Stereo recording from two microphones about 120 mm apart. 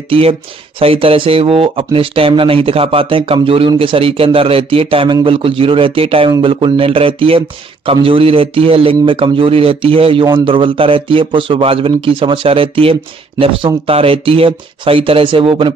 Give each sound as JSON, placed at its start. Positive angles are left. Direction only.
{"t": 0.1, "sound": "speech", "side_deg": -50}